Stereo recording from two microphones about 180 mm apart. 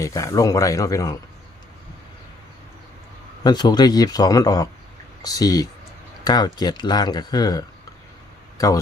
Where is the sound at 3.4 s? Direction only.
20° left (ahead or behind).